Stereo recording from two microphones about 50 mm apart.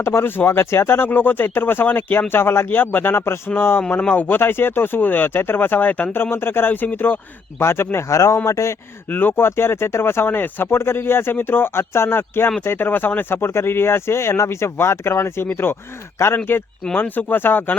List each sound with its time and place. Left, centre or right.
0.0 s speech: left
2.3 s speech: left
2.6 s speech: left
6.3 s speech: left
7.6 s speech: left
8.1 s speech: left
9.0 s speech: left
16.2 s speech: left
17.0 s speech: left